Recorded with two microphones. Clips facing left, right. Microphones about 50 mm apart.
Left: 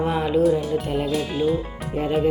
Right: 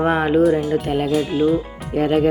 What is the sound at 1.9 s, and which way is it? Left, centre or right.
Speech, right.